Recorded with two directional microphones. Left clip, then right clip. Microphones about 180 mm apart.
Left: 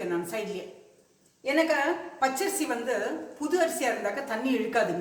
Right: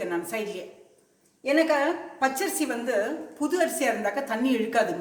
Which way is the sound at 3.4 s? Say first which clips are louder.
Right 1 dB; 45° right (ahead or behind).